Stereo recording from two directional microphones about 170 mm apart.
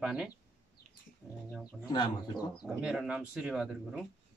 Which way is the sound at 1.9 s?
25° left (ahead or behind).